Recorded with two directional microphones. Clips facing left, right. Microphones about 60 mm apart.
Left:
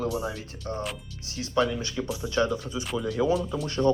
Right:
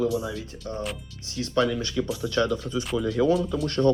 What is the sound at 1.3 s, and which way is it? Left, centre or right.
Speech, centre.